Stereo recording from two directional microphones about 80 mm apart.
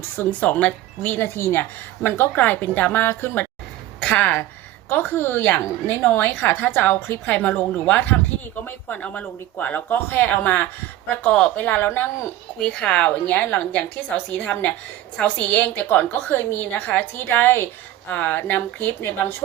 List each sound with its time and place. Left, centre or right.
0.2 s a woman's voice: left
1.4 s a woman's voice: left
2.0 s a woman's voice: left
12.5 s a woman's voice: centre; by 19.4 s left